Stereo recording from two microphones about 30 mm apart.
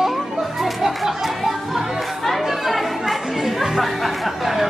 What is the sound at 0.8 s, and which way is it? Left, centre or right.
Speech, centre.